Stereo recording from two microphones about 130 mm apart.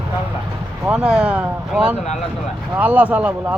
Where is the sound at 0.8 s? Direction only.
5° right (ahead or behind).